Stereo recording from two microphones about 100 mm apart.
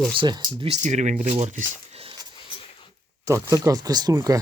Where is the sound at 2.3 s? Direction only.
60° left (ahead or behind).